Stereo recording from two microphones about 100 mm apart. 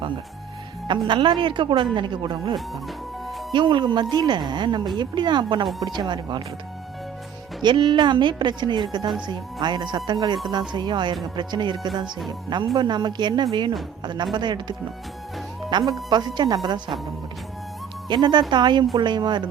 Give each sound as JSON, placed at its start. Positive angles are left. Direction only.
{"t": 0.9, "sound": "speech", "side_deg": -55}
{"t": 7.6, "sound": "speech", "side_deg": -50}
{"t": 18.1, "sound": "speech", "side_deg": -50}